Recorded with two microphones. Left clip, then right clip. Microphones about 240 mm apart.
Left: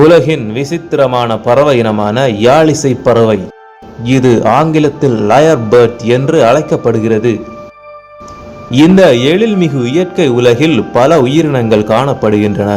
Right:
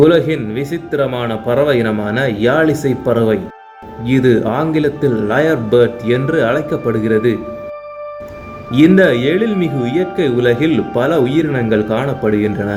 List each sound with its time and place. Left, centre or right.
0.1 s a man's voice: left
7.0 s speech: left
9.0 s a man's voice: left